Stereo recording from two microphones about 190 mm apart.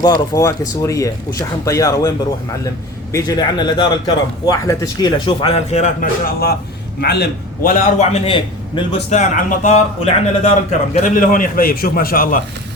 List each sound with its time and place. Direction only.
0.0 s a man's voice: 20° left (ahead or behind); by 12.4 s 50° left (ahead or behind)